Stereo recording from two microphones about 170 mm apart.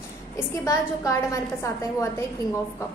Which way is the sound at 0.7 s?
15° left (ahead or behind).